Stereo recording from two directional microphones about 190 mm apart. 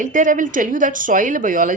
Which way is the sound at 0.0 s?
45° right (ahead or behind).